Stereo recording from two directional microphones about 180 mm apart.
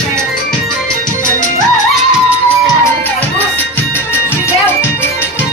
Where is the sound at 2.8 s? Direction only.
10° left (ahead or behind).